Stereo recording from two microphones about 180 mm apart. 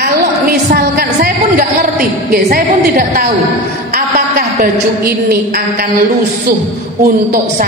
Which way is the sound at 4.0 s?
55° right (ahead or behind).